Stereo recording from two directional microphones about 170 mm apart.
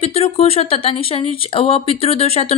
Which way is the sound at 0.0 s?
35° left (ahead or behind).